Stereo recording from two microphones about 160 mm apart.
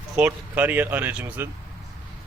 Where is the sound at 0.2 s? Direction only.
10° right (ahead or behind).